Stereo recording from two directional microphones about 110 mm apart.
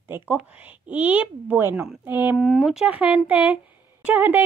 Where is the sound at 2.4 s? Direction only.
Centre (ahead or behind).